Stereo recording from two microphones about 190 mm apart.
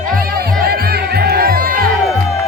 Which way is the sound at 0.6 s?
55° right (ahead or behind).